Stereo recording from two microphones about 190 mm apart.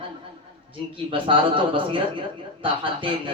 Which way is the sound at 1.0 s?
25° right (ahead or behind).